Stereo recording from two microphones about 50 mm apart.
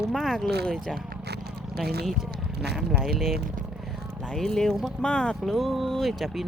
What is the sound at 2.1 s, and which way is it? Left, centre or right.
Speech, centre.